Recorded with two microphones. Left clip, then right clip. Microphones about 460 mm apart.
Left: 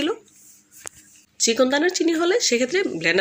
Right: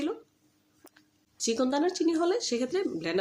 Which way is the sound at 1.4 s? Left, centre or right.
Left.